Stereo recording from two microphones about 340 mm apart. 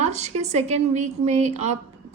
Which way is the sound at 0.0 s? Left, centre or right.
Centre.